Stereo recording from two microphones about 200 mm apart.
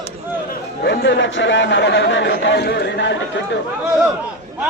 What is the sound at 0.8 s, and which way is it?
Speech, 60° left (ahead or behind).